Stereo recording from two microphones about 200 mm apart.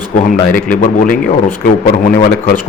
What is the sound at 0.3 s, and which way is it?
Speech, 45° left (ahead or behind).